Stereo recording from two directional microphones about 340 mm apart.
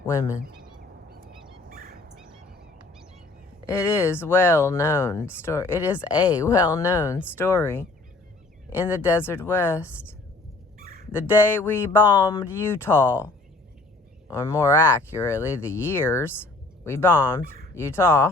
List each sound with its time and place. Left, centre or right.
1.7 s dog: right
3.7 s speech: centre
10.8 s fowl: right
11.1 s speech: centre
14.3 s speech: centre